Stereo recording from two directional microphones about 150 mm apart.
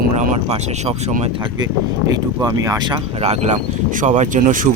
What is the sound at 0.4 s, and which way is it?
Speech, 45° right (ahead or behind).